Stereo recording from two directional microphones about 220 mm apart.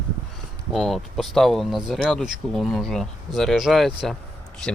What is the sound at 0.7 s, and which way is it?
Speech, centre (ahead or behind).